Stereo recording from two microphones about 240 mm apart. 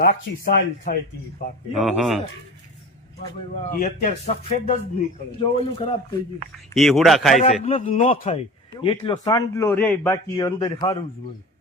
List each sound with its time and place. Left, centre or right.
0.0 s speech: left
1.7 s a man's voice: centre
3.8 s speech: left
6.7 s a man's voice: centre
7.6 s a man's voice: left